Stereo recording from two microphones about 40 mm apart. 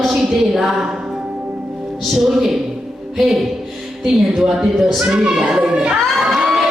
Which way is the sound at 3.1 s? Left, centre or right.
Centre.